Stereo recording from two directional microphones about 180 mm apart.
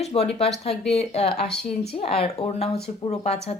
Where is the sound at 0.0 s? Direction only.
35° left (ahead or behind).